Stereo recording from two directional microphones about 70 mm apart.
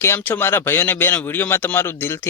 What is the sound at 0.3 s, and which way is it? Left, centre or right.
A man's voice, left.